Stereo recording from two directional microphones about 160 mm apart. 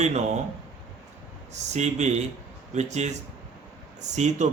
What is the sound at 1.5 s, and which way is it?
Speech, 45° right (ahead or behind).